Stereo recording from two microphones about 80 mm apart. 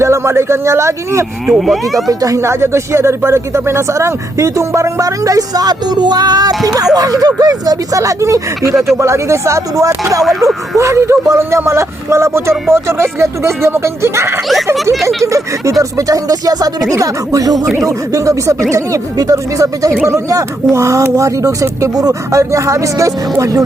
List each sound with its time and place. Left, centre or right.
0.0 s speech: right
1.5 s speech: centre
2.0 s speech: right